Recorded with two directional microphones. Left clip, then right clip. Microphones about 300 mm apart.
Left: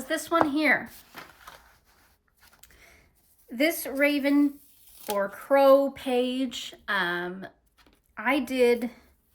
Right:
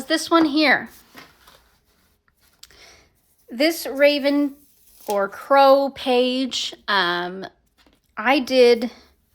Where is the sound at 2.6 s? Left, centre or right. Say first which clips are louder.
Right 10 dB; centre.